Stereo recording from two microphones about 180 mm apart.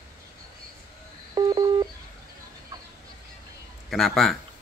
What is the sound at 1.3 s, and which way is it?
Telephone dialing, 20° right (ahead or behind).